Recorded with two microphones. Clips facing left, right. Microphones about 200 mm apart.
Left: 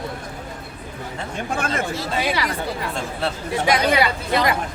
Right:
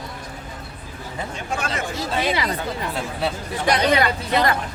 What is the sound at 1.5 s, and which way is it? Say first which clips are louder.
Speech: left 3 dB; 55° left (ahead or behind).